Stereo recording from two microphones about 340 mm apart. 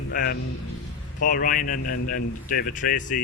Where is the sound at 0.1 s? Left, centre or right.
Left.